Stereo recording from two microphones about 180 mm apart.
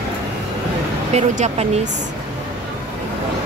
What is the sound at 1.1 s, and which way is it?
Speech, 40° right (ahead or behind).